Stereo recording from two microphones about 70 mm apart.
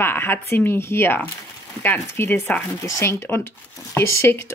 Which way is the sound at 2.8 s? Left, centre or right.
Left.